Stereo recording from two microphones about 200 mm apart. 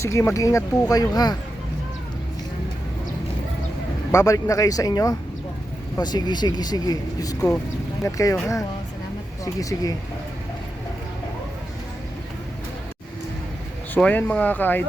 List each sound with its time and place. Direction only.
0.0 s speech: 15° left (ahead or behind)
4.1 s speech: 15° left (ahead or behind)
13.9 s speech: 10° left (ahead or behind)